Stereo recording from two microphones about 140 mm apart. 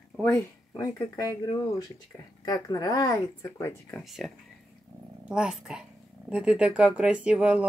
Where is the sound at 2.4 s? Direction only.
30° left (ahead or behind).